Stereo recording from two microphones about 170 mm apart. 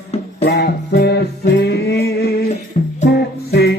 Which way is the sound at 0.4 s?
80° left.